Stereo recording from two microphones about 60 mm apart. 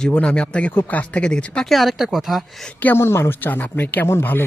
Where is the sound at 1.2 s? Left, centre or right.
Centre.